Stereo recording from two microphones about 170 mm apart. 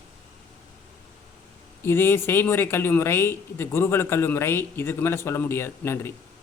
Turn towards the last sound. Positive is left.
turn(degrees=15)  # may be behind; listen again after turning